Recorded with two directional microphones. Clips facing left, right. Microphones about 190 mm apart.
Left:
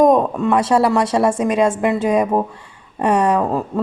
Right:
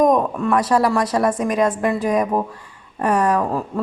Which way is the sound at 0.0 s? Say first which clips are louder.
Left 3 dB; 25° left (ahead or behind).